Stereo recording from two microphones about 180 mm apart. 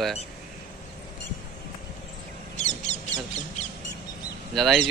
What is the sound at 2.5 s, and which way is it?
Mouse, 40° left (ahead or behind).